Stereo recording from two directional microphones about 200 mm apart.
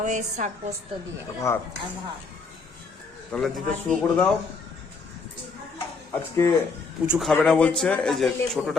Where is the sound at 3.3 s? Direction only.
Centre (ahead or behind).